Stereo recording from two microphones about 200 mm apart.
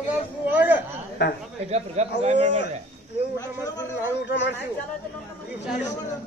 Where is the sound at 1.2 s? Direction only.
60° left (ahead or behind).